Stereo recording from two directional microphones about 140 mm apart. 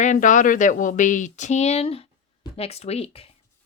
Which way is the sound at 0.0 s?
65° left (ahead or behind).